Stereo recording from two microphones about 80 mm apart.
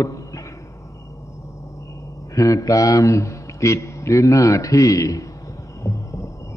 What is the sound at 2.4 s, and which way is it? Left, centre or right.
A man's voice, left.